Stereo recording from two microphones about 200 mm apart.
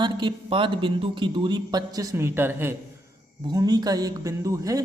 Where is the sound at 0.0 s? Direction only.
25° right (ahead or behind).